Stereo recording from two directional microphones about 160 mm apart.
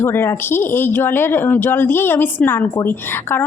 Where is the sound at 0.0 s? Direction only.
15° left (ahead or behind).